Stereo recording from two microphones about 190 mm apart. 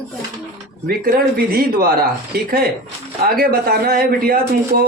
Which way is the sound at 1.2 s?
50° right (ahead or behind).